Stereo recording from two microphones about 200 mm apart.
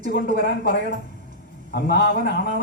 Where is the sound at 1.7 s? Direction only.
55° left (ahead or behind).